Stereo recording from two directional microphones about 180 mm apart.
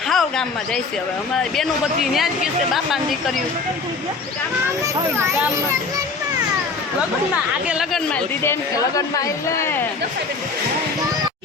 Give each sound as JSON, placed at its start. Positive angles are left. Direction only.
{"t": 0.1, "sound": "speech", "side_deg": 0}
{"t": 4.8, "sound": "a child's voice", "side_deg": -15}
{"t": 7.7, "sound": "speech", "side_deg": 0}
{"t": 8.4, "sound": "speech", "side_deg": 20}